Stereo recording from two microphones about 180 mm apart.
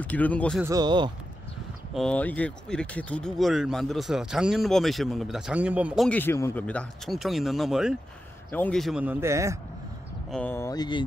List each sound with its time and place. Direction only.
0.0 s speech: 10° left (ahead or behind)
0.7 s speech: 25° right (ahead or behind)
2.0 s speech: 5° left (ahead or behind)
6.0 s speech: 10° left (ahead or behind)
8.5 s speech: 10° left (ahead or behind); by 9.6 s 15° right (ahead or behind)
10.3 s speech: 10° left (ahead or behind)